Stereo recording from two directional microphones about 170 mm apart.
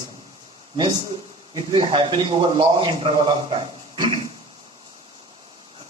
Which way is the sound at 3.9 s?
25° right (ahead or behind).